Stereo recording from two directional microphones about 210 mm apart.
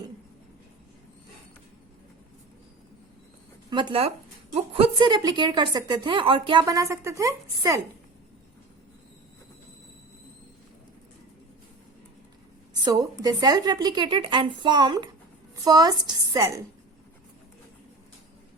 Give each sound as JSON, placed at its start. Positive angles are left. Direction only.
{"t": 3.7, "sound": "a woman's voice", "side_deg": -20}
{"t": 12.8, "sound": "a woman's voice", "side_deg": -15}